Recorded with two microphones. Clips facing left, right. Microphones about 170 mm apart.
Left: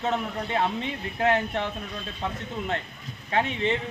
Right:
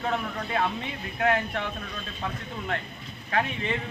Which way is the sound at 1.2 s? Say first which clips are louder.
Left 2 dB; 30° left (ahead or behind).